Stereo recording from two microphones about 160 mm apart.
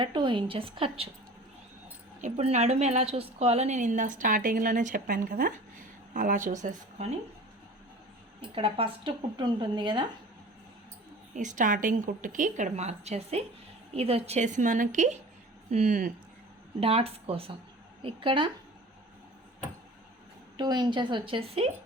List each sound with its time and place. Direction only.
0.0 s speech: 30° right (ahead or behind)
2.2 s a woman's voice: 45° right (ahead or behind)
8.4 s speech: 35° right (ahead or behind)
11.3 s a woman's voice: 55° right (ahead or behind)
16.8 s speech: 40° right (ahead or behind)
20.6 s a woman's voice: 25° right (ahead or behind)